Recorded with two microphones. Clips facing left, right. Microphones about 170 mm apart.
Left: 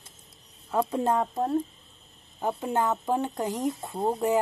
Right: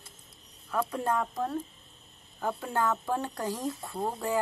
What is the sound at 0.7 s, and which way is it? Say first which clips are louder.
Speech: left 4 dB; 25° left (ahead or behind).